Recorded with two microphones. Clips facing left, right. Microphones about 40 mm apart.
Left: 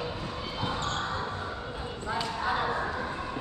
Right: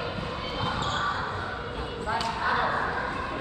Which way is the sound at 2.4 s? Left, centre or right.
Centre.